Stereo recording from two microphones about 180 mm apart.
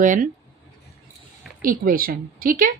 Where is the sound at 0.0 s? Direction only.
45° right (ahead or behind).